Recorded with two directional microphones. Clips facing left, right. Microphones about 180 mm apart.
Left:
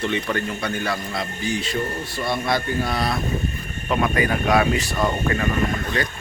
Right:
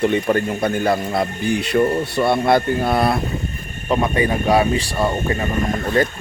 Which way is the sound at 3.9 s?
30° right (ahead or behind).